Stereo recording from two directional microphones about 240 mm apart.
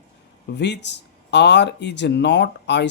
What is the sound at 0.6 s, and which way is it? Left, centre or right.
Speech, left.